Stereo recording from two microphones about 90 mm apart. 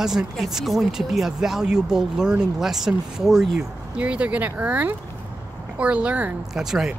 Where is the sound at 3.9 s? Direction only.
15° right (ahead or behind).